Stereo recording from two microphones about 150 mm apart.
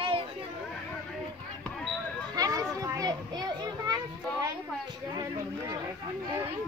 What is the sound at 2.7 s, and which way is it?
Children playing, 25° right (ahead or behind).